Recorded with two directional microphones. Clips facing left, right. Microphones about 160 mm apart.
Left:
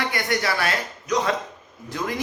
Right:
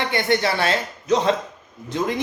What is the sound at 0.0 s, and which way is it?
A man's voice, 25° right (ahead or behind).